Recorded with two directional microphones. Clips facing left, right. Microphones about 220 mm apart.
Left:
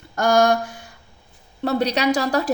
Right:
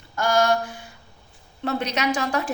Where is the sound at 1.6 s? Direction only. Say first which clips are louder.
Left 5 dB; 35° left (ahead or behind).